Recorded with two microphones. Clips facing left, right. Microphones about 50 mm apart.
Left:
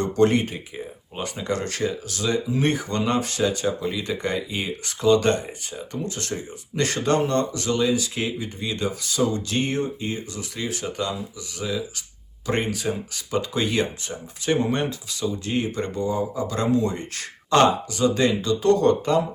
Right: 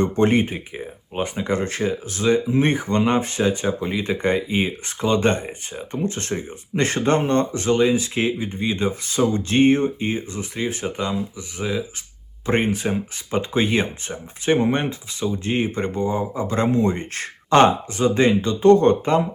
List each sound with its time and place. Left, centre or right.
0.0 s speech: right